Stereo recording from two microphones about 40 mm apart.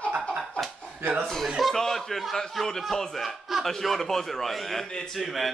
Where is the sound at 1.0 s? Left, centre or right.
Right.